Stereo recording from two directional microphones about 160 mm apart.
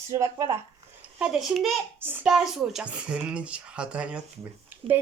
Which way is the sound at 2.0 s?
15° right (ahead or behind).